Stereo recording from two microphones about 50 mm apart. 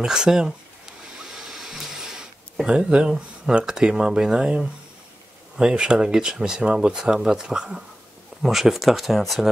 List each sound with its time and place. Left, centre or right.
0.0 s a sound: centre
2.6 s speech: right
8.4 s speech: centre